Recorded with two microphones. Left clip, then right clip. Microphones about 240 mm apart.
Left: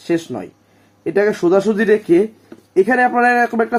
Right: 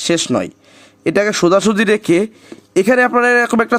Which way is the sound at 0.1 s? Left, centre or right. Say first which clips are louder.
Right 3 dB; right.